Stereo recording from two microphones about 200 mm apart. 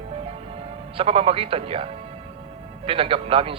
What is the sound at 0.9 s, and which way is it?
Speech, 30° right (ahead or behind).